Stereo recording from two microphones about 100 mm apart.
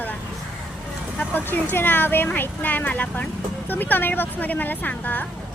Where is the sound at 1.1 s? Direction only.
15° left (ahead or behind).